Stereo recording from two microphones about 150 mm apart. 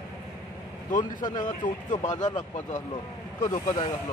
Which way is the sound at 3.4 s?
25° left (ahead or behind).